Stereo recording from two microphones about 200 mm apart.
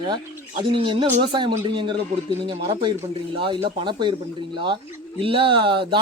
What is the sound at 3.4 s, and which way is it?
Speech, 25° right (ahead or behind).